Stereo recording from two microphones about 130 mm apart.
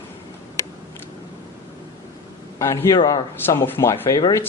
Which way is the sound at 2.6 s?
20° left (ahead or behind).